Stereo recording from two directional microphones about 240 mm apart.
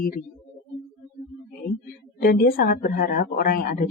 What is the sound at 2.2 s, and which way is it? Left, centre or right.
Speech, left.